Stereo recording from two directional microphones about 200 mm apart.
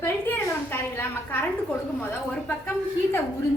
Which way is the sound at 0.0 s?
10° left (ahead or behind).